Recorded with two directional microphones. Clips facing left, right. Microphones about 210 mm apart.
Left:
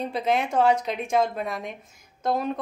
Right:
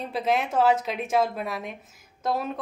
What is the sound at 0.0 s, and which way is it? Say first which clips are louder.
A woman's voice: left 1 dB; centre (ahead or behind).